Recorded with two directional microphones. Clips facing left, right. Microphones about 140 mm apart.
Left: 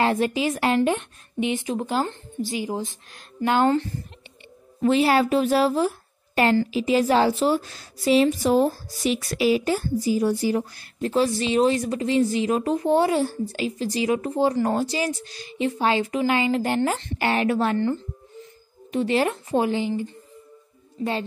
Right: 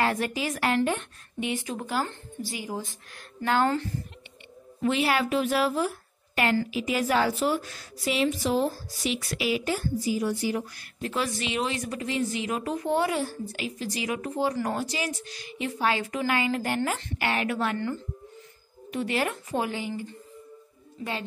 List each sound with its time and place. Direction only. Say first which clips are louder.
0.0 s a woman's voice: left 5 dB; 25° left (ahead or behind)
4.8 s a woman's voice: left 6 dB; 35° left (ahead or behind)